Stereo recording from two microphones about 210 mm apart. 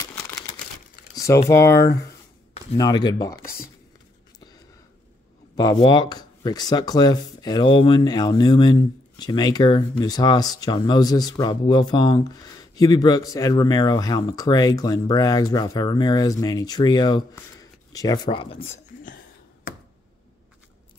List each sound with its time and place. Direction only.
1.1 s a sound: 15° left (ahead or behind)
1.5 s speech: 15° left (ahead or behind)
5.6 s speech: 20° left (ahead or behind)